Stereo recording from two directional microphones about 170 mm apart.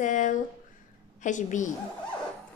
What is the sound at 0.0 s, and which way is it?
A woman's voice, 50° left (ahead or behind).